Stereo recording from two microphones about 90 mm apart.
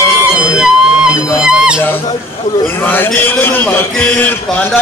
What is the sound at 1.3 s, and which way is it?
Dog, 10° right (ahead or behind).